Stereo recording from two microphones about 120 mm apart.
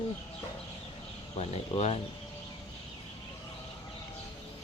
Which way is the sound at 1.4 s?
55° left (ahead or behind).